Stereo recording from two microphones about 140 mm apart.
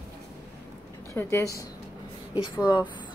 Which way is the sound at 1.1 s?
20° left (ahead or behind).